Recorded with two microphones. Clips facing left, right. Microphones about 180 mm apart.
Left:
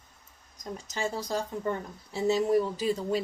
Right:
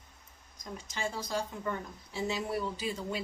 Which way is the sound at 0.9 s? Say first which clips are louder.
Left 4 dB; 40° left (ahead or behind).